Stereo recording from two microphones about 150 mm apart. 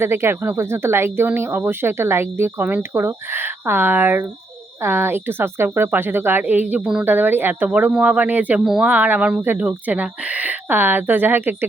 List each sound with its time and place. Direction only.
0.0 s speech: 15° right (ahead or behind)